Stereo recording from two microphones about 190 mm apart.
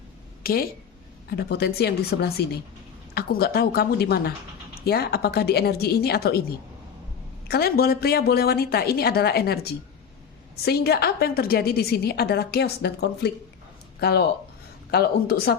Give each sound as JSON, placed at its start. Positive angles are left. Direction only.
{"t": 0.4, "sound": "a woman's voice", "side_deg": 50}
{"t": 7.4, "sound": "a woman's voice", "side_deg": 55}